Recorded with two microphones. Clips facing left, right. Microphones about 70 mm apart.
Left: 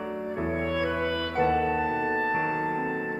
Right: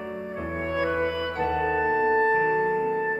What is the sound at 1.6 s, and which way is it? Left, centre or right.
Music, right.